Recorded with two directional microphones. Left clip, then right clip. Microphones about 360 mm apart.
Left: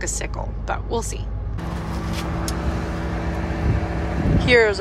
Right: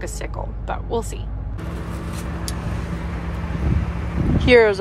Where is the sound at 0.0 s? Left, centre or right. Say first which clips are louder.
Left 2 dB; centre.